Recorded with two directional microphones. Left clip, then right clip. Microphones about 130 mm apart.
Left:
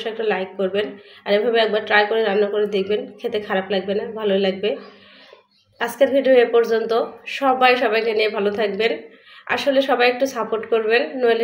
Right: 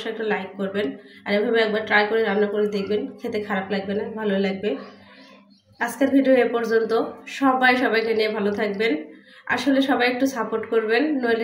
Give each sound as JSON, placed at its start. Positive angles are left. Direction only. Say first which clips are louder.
{"t": 0.0, "sound": "speech", "louder": "left 3 dB", "side_deg": 35}
{"t": 5.8, "sound": "speech", "louder": "left 4 dB", "side_deg": 35}